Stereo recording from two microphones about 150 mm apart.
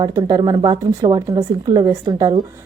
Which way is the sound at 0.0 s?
30° right (ahead or behind).